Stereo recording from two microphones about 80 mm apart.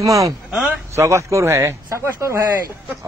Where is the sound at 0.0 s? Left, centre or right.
Right.